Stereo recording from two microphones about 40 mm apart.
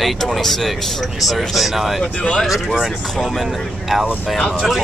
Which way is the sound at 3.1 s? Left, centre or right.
Centre.